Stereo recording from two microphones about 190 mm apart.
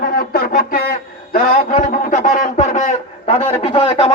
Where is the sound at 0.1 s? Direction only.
50° left (ahead or behind).